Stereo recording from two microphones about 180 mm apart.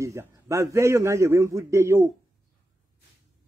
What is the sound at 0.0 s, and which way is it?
Speech, 15° right (ahead or behind).